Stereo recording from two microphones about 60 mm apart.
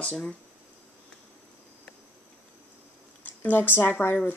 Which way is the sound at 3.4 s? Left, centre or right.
Left.